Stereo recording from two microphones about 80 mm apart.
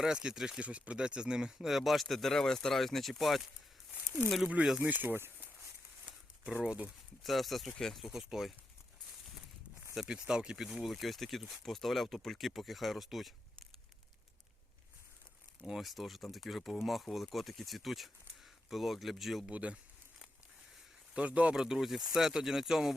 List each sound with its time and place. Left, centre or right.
0.0 s speech: centre
4.4 s speech: centre
7.3 s speech: centre
9.9 s speech: centre
15.6 s speech: centre
19.5 s speech: centre
21.1 s speech: centre